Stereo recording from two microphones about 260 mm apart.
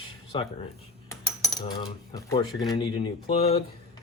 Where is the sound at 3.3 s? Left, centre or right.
Left.